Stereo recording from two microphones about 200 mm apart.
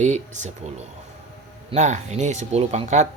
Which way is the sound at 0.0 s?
35° right (ahead or behind).